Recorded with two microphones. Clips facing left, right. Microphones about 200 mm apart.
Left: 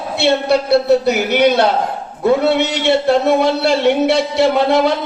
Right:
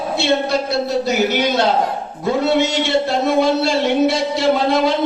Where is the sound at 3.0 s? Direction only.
60° left (ahead or behind).